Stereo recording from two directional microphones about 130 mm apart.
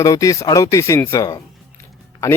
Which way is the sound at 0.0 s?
25° left (ahead or behind).